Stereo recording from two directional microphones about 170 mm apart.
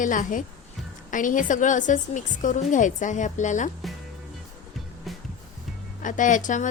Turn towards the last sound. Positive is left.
turn(degrees=50)  # may be behind; listen again after turning